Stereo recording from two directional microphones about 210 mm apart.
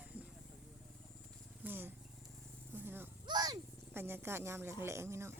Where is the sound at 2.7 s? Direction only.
10° right (ahead or behind).